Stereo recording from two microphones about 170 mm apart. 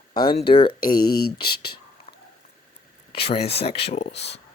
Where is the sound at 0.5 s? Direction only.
30° left (ahead or behind).